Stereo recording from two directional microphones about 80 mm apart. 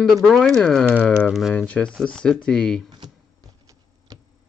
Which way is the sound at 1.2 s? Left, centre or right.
Centre.